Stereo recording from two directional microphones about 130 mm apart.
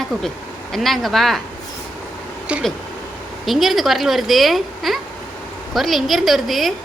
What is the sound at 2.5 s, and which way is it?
A woman's voice, 10° right (ahead or behind).